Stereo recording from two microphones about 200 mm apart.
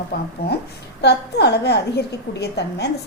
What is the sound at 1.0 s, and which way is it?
A woman's voice, 55° left (ahead or behind).